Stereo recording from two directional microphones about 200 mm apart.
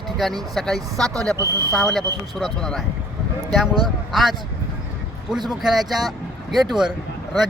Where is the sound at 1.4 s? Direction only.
15° right (ahead or behind).